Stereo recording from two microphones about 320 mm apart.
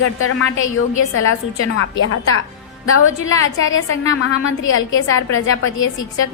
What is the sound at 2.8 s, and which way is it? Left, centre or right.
A woman's voice, left.